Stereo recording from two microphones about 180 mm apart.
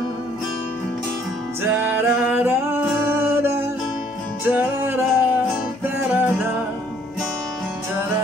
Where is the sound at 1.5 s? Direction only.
10° right (ahead or behind).